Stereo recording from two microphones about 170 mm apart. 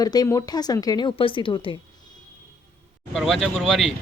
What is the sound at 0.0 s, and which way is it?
A woman's voice, 20° left (ahead or behind).